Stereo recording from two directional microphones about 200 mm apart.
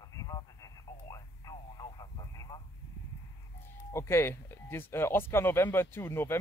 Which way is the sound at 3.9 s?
15° left (ahead or behind).